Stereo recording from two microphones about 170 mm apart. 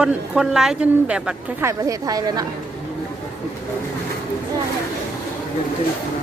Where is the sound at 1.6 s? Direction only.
20° right (ahead or behind).